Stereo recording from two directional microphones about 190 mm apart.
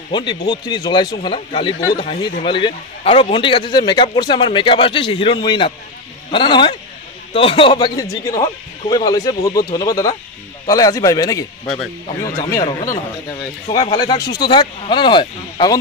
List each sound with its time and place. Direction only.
0.1 s a man's voice: 25° left (ahead or behind)
13.7 s a man's voice: 25° left (ahead or behind)